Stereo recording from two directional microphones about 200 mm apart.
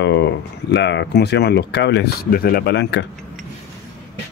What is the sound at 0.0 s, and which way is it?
Speech, 60° left (ahead or behind).